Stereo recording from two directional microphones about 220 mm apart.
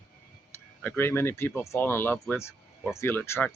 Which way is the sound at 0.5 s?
10° left (ahead or behind).